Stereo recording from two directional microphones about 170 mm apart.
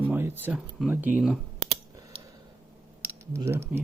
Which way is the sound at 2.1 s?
30° right (ahead or behind).